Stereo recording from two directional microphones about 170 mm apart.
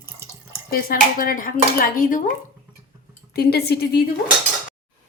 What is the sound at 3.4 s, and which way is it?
Speech, 70° left (ahead or behind).